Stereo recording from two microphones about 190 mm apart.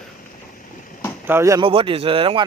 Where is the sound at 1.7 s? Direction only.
30° right (ahead or behind).